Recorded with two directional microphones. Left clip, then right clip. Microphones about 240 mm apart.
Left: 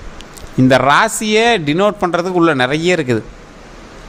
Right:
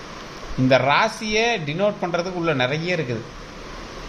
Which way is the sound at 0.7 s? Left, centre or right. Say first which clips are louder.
Left 6 dB; left.